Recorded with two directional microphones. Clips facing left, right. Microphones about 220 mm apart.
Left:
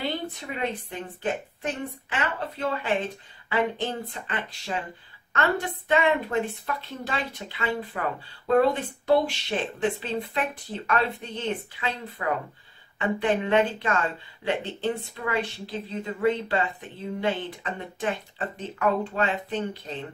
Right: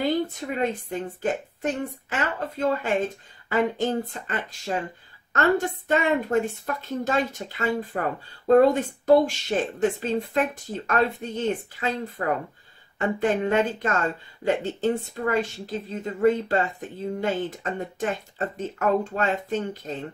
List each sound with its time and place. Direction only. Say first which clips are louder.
0.6 s speech: right 4 dB; 45° right (ahead or behind)